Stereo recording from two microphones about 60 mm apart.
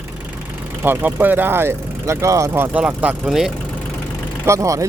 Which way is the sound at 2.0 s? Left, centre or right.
Right.